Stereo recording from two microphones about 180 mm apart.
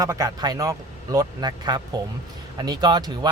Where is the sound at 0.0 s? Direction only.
20° right (ahead or behind).